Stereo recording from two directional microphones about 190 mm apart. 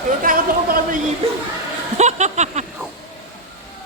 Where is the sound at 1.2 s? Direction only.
35° right (ahead or behind).